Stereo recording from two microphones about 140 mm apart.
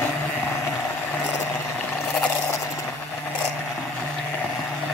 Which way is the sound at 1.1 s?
15° left (ahead or behind).